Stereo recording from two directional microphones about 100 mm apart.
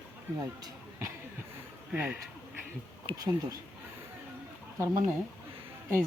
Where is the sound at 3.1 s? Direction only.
55° right (ahead or behind).